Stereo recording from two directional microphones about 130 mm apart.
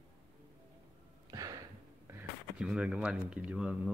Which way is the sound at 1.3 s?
30° right (ahead or behind).